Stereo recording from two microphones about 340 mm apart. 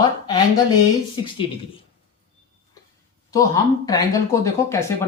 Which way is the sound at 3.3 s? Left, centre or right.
Centre.